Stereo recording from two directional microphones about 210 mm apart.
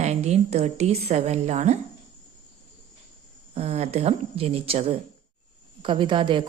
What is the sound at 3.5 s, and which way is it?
Speech, 30° right (ahead or behind).